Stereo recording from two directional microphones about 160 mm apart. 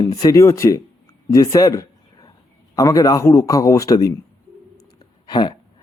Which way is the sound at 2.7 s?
20° left (ahead or behind).